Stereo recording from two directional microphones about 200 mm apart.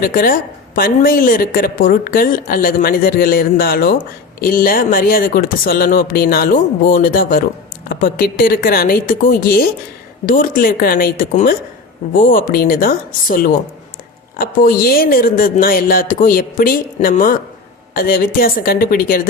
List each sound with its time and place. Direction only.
0.0 s a woman's voice: 45° left (ahead or behind)